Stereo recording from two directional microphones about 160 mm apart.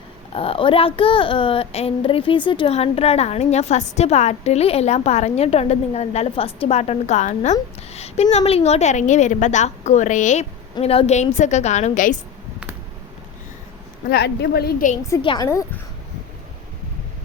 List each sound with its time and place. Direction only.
0.3 s a child's voice: 35° left (ahead or behind)
10.8 s a woman's voice: 35° left (ahead or behind)
14.1 s a woman's voice: 85° left
15.2 s a child's voice: 30° left (ahead or behind)
15.4 s speech: 15° left (ahead or behind)